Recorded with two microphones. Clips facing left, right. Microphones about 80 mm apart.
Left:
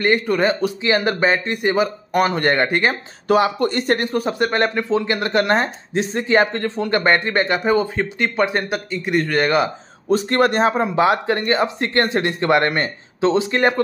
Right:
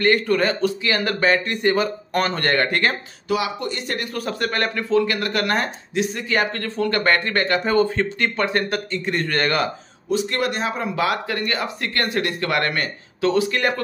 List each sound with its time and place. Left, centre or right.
0.0 s speech: centre
3.3 s speech: left
4.1 s speech: left
10.0 s speech: left